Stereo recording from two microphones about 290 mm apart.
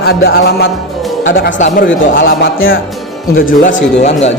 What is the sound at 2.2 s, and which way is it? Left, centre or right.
A man's voice, left.